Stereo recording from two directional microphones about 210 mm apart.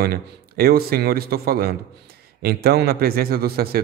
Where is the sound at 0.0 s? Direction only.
45° right (ahead or behind).